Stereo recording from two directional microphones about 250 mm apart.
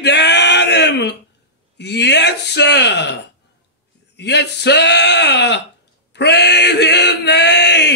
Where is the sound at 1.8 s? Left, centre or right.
Left.